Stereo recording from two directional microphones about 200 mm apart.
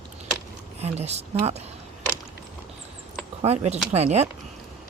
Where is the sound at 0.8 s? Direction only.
35° right (ahead or behind).